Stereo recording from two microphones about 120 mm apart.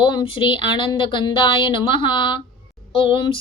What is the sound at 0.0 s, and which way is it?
Speech, 40° left (ahead or behind).